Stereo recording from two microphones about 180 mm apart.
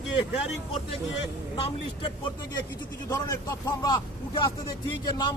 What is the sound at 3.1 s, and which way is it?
Speech, 20° left (ahead or behind).